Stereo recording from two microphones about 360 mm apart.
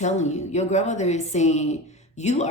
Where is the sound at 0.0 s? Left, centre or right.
Centre.